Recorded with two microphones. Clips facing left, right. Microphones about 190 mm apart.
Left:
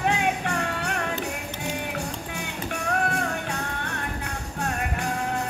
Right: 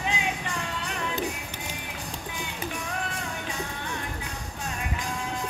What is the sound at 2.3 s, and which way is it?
Music, 65° left (ahead or behind).